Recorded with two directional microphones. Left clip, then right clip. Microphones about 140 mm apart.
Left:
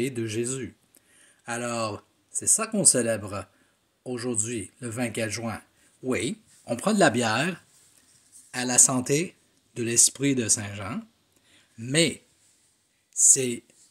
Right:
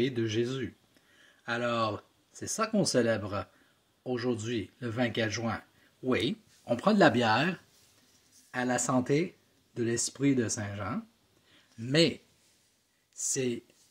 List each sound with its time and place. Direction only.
0.0 s speech: 20° left (ahead or behind)
11.5 s a sound: 30° left (ahead or behind)
13.1 s speech: 30° left (ahead or behind)